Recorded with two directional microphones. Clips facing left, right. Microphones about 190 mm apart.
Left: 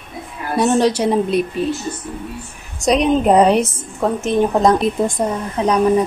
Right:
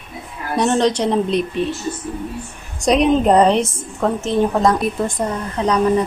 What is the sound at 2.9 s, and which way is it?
A woman's voice, centre (ahead or behind).